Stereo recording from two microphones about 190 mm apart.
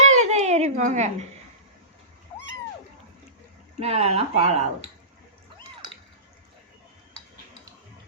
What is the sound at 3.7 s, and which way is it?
Speech, 35° right (ahead or behind).